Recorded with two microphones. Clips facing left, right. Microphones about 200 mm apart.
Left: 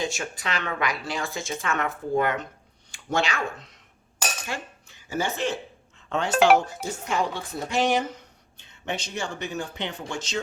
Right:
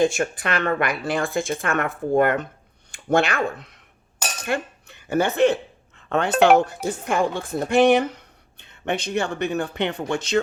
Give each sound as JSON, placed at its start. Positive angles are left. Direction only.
{"t": 0.0, "sound": "a woman's voice", "side_deg": -55}